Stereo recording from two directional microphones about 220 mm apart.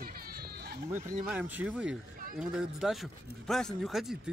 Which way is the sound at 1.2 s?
5° right (ahead or behind).